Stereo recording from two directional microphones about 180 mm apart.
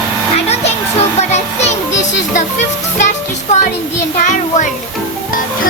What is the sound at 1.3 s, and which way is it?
Music, 40° left (ahead or behind).